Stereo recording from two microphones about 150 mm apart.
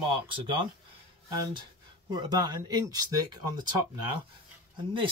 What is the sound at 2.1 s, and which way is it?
Speech, 30° right (ahead or behind).